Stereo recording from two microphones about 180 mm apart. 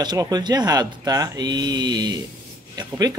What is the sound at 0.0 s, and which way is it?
Speech, 25° right (ahead or behind).